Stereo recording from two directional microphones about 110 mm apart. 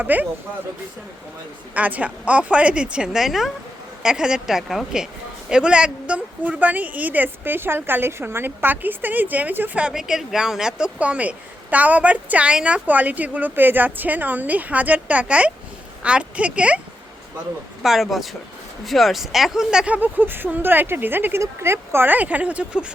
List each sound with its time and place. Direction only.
0.0 s a woman's voice: 15° right (ahead or behind)
1.7 s a woman's voice: 15° right (ahead or behind)
17.8 s a woman's voice: centre (ahead or behind)